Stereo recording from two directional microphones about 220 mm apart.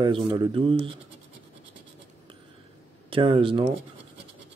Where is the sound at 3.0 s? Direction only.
25° right (ahead or behind).